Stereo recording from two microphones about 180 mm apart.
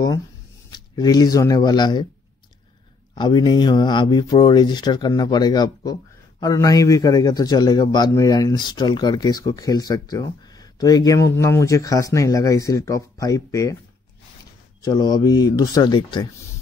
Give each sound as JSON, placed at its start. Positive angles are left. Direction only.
{"t": 0.7, "sound": "speech", "side_deg": 20}
{"t": 3.2, "sound": "a man's voice", "side_deg": 25}
{"t": 14.8, "sound": "a man's voice", "side_deg": 20}